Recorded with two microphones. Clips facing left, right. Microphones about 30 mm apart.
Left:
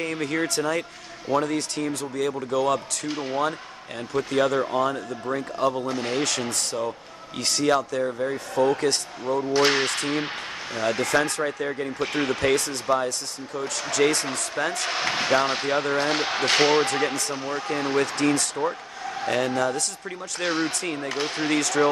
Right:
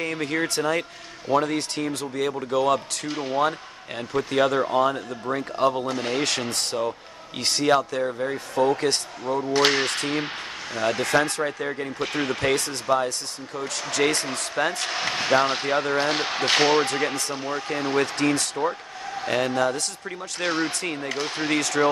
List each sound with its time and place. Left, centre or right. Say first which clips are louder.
0.0 s speech: even; centre
3.3 s speech: right 5 dB; centre
15.0 s speech: left 1 dB; centre
15.3 s speech: right 2 dB; centre